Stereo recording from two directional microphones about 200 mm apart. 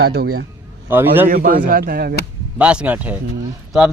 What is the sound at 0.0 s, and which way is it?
Speech, 50° right (ahead or behind).